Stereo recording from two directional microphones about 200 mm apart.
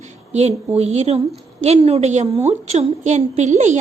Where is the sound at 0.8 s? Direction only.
30° right (ahead or behind).